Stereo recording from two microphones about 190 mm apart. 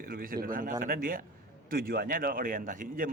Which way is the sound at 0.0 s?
50° right (ahead or behind).